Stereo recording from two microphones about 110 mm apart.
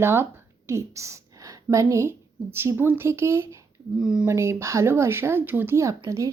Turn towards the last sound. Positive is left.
turn(degrees=-30)  # may be behind; listen again after turning